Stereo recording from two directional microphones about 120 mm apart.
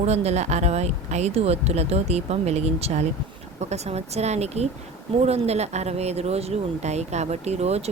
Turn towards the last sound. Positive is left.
turn(degrees=-65)  # may be behind; listen again after turning